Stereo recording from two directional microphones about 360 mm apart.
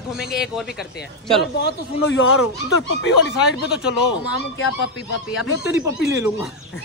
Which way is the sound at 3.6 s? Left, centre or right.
Centre.